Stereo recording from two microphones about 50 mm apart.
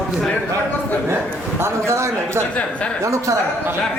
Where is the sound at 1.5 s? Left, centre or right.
Right.